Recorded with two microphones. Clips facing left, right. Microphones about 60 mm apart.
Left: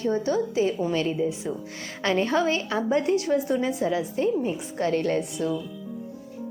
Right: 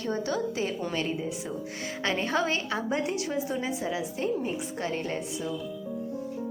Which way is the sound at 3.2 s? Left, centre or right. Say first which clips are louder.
Left 6 dB; left.